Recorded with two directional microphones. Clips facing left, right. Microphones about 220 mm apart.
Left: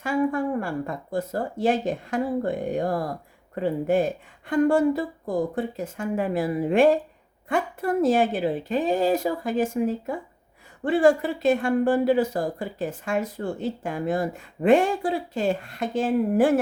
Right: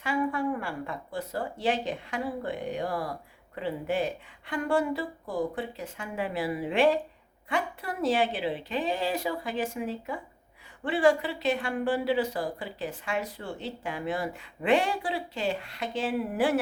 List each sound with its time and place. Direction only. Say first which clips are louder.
0.0 s speech: left 5 dB; 45° left (ahead or behind)